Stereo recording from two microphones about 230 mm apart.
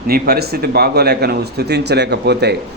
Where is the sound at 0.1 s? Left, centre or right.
Right.